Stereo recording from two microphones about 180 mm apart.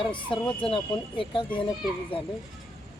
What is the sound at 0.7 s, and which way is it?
Speech, 25° left (ahead or behind).